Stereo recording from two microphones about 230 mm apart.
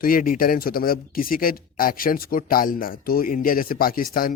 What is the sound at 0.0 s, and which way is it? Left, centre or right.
A man's voice, left.